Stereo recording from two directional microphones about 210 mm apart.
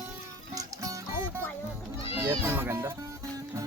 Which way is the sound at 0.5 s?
15° right (ahead or behind).